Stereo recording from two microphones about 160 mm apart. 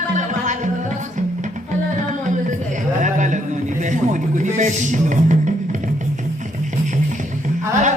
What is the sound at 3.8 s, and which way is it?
Music, 50° right (ahead or behind).